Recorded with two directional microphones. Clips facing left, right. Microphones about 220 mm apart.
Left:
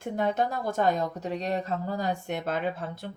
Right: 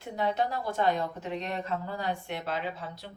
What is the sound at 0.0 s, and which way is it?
Speech, 50° left (ahead or behind).